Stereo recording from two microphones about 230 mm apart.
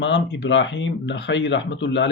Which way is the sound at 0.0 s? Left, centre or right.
Left.